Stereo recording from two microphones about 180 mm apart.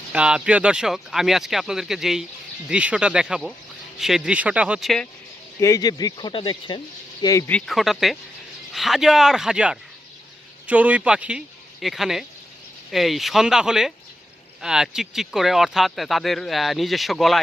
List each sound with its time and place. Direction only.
0.1 s speech: 5° right (ahead or behind)
5.5 s speech: 20° left (ahead or behind)
7.5 s speech: centre (ahead or behind)